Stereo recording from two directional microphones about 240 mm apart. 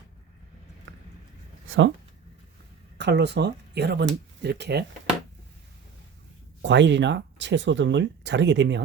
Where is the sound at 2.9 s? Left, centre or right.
Right.